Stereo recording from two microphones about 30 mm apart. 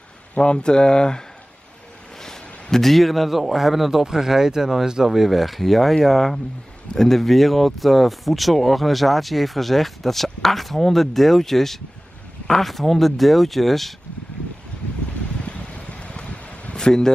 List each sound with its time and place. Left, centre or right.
0.4 s speech: left
2.2 s a sound: centre
2.9 s speech: centre
5.0 s speech: centre
15.4 s a sound: left
16.7 s speech: left